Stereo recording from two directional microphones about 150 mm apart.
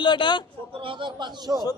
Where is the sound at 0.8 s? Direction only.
35° right (ahead or behind).